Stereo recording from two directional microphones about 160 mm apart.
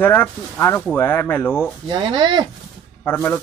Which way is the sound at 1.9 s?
30° right (ahead or behind).